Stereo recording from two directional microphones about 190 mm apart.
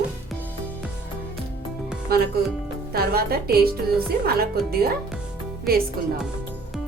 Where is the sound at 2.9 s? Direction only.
55° right (ahead or behind).